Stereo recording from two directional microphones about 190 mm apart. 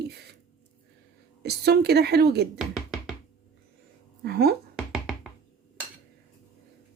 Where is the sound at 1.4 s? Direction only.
60° right (ahead or behind).